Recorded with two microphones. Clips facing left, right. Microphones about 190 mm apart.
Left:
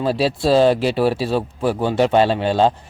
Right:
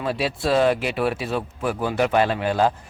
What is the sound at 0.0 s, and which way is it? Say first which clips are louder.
Speech: left 6 dB; 30° left (ahead or behind).